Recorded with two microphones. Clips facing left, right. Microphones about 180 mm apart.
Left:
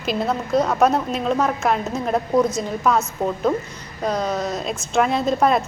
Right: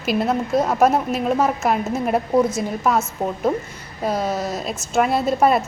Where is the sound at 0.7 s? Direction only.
5° right (ahead or behind).